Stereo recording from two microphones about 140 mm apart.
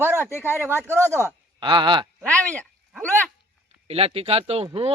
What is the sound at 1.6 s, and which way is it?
Speech, 35° right (ahead or behind).